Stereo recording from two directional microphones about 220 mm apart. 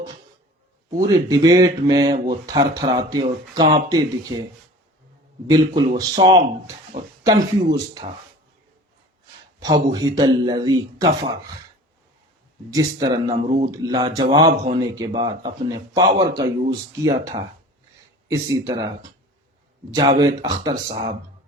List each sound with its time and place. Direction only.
0.9 s speech: 15° right (ahead or behind)
5.5 s speech: 20° right (ahead or behind)
9.6 s speech: 15° right (ahead or behind)
12.7 s speech: 20° right (ahead or behind)
13.3 s speech: 30° right (ahead or behind)
13.7 s speech: 15° right (ahead or behind)
14.5 s speech: 30° right (ahead or behind)
14.9 s speech: 20° right (ahead or behind)